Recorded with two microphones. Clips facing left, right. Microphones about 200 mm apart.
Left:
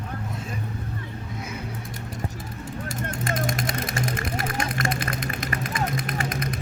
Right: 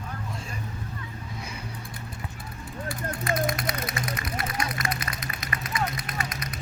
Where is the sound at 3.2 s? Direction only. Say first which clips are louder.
Right 1 dB; 45° left (ahead or behind).